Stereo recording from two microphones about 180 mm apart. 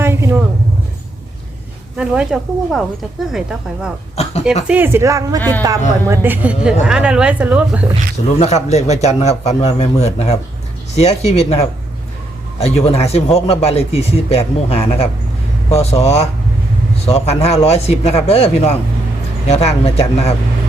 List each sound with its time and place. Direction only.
0.0 s vehicle: 15° right (ahead or behind)
2.0 s speech: 5° right (ahead or behind)
4.1 s a sound: 35° left (ahead or behind)
4.6 s speech: 10° right (ahead or behind)
5.4 s speech: 10° left (ahead or behind)
6.1 s speech: 10° right (ahead or behind)
8.4 s a man's voice: 35° left (ahead or behind)
12.5 s a man's voice: 35° left (ahead or behind)